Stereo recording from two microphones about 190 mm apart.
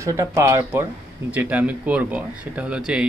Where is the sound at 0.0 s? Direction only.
15° right (ahead or behind).